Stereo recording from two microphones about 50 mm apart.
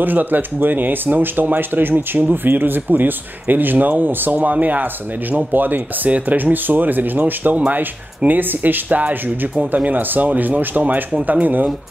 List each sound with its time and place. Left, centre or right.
0.0 s speech: right